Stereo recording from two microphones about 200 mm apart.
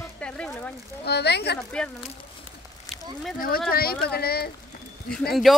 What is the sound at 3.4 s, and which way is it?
Speech, 50° left (ahead or behind).